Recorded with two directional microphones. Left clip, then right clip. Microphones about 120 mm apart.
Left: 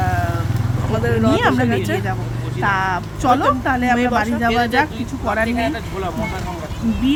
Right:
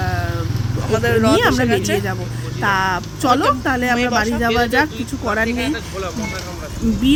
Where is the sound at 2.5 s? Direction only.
25° right (ahead or behind).